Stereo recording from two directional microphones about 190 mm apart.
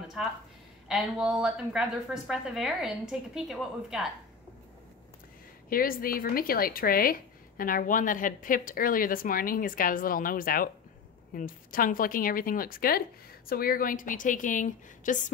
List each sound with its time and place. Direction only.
0.2 s a woman's voice: centre (ahead or behind)
5.7 s speech: 50° left (ahead or behind)